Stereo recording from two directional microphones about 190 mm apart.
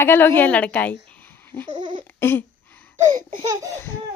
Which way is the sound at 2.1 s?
10° left (ahead or behind).